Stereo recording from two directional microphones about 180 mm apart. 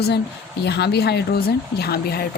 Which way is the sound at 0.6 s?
65° left (ahead or behind).